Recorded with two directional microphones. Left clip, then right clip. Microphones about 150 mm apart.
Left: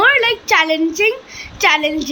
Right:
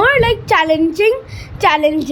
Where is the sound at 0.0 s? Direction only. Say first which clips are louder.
Even; 45° right (ahead or behind).